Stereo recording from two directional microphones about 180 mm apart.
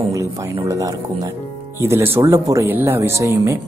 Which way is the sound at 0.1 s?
15° right (ahead or behind).